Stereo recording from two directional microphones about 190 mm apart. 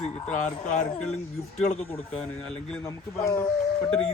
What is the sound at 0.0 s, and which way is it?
Speech, 35° left (ahead or behind).